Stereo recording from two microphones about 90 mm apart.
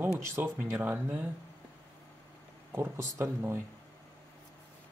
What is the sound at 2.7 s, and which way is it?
Speech, 30° right (ahead or behind).